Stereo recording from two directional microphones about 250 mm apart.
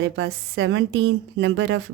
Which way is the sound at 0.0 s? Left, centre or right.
Right.